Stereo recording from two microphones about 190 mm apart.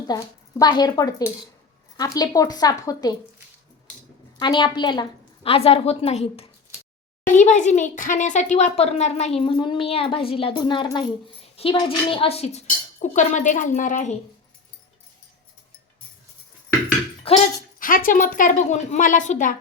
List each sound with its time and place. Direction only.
0.1 s a woman's voice: 20° left (ahead or behind)
4.4 s a woman's voice: 25° left (ahead or behind); by 14.2 s 40° left (ahead or behind)
17.3 s speech: 30° left (ahead or behind)
17.7 s a woman's voice: 45° left (ahead or behind)